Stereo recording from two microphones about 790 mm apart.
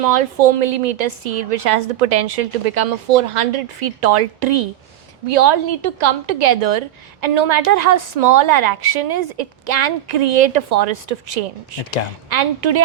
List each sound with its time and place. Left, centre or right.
0.0 s a woman's voice: right